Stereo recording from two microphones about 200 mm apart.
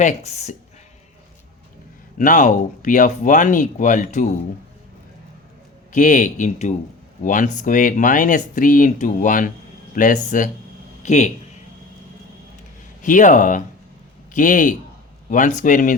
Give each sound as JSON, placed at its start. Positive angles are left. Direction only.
{"t": 0.0, "sound": "speech", "side_deg": 35}
{"t": 2.1, "sound": "speech", "side_deg": 40}
{"t": 5.9, "sound": "a man's voice", "side_deg": 40}
{"t": 13.0, "sound": "speech", "side_deg": 40}